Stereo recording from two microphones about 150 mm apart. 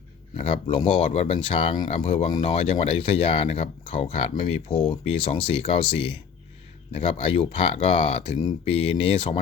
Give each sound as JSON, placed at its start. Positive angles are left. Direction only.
{"t": 0.5, "sound": "speech", "side_deg": 35}